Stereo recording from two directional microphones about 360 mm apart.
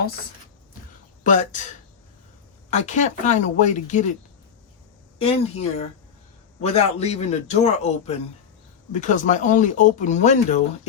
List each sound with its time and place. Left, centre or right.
1.2 s speech: left
2.6 s speech: centre
5.2 s a man's voice: centre